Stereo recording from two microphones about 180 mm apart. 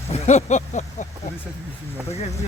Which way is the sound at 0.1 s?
40° left (ahead or behind).